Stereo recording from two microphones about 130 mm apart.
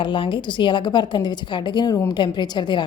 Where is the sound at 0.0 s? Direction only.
40° left (ahead or behind).